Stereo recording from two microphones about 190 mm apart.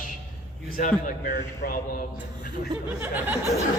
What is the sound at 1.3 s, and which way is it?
Speech, 55° left (ahead or behind).